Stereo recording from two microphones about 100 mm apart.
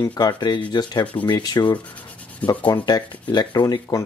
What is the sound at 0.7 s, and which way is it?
Rub, 45° left (ahead or behind).